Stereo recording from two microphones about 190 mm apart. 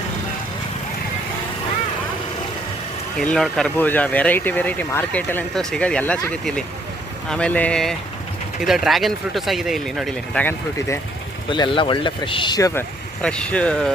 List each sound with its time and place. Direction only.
3.2 s speech: centre (ahead or behind)
11.4 s speech: 25° left (ahead or behind)
13.2 s speech: 5° left (ahead or behind)